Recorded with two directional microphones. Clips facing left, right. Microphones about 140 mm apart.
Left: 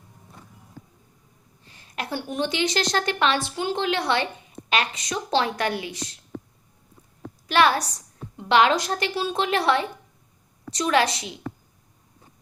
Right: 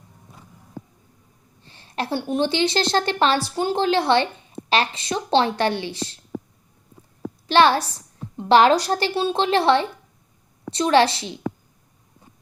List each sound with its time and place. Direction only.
1.6 s a woman's voice: 30° right (ahead or behind)
7.4 s a woman's voice: 30° right (ahead or behind)